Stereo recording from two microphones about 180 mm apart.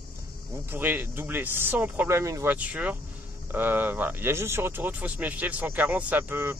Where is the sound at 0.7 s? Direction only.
10° right (ahead or behind).